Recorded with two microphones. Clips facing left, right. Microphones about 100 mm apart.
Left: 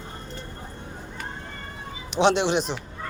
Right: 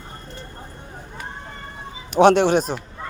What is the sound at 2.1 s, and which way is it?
Speech, 50° right (ahead or behind).